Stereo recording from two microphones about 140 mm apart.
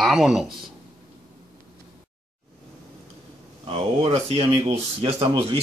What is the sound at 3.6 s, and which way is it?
Speech, 40° right (ahead or behind).